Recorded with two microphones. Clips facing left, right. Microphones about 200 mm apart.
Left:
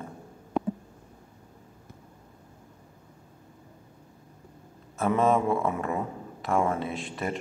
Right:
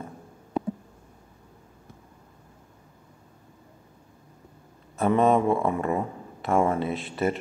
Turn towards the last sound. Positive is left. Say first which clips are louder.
# right 5 dB
turn(degrees=0)  # may be behind; listen again after turning